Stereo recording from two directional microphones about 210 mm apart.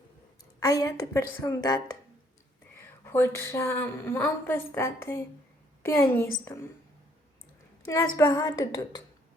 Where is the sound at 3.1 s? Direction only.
10° left (ahead or behind).